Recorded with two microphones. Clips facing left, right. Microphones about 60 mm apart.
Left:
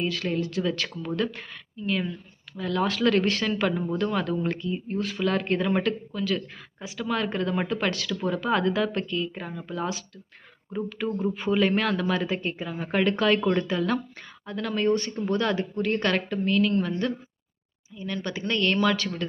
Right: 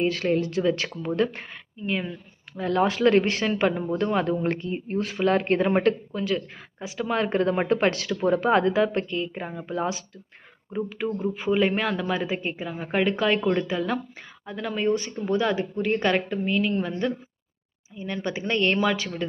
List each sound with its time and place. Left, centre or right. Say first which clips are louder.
0.0 s a woman's voice: right 4 dB; right
1.9 s speech: even; centre
2.6 s a woman's voice: right 3 dB; right
6.2 s speech: right 1 dB; centre
6.8 s a woman's voice: right 2 dB; right
10.8 s speech: right 1 dB; centre
11.1 s speech: even; centre
17.9 s a woman's voice: right 2 dB; right